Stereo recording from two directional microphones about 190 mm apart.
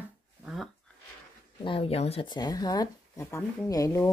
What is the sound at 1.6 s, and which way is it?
Speech, 30° left (ahead or behind).